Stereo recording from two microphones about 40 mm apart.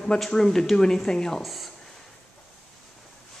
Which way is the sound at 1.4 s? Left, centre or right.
Centre.